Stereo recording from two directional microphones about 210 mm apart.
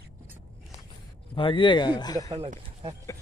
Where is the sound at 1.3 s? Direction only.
25° left (ahead or behind).